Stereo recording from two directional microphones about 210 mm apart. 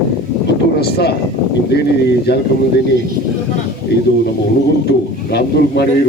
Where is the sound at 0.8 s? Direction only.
50° left (ahead or behind).